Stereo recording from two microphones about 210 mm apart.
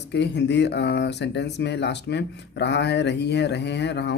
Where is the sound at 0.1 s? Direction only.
55° left (ahead or behind).